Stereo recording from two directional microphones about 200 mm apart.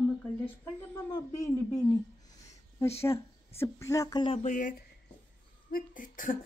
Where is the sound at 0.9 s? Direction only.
15° left (ahead or behind).